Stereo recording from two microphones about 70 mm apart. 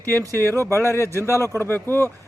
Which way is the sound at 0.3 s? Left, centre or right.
Left.